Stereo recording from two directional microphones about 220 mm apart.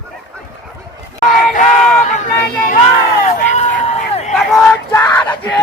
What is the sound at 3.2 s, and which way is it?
Run, 30° left (ahead or behind).